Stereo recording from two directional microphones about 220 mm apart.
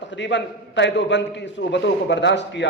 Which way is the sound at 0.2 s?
55° left (ahead or behind).